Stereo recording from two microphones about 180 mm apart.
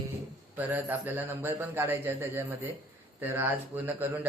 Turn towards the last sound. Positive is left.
turn(degrees=-10)  # may be behind; listen again after turning